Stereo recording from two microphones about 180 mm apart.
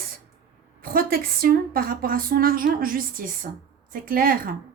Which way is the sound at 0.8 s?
55° right (ahead or behind).